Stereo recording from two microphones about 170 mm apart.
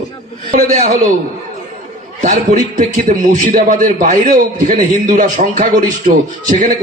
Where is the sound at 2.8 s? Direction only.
50° right (ahead or behind).